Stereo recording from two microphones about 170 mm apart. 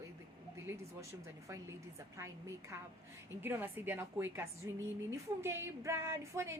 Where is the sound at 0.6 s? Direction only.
15° right (ahead or behind).